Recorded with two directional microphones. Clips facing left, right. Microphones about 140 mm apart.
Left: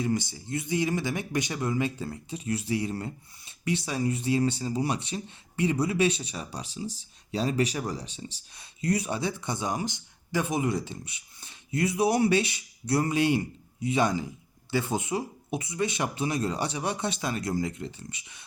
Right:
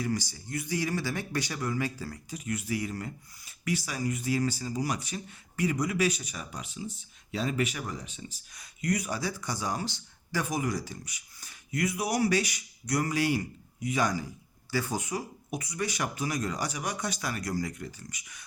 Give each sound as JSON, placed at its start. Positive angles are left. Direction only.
{"t": 0.0, "sound": "speech", "side_deg": 25}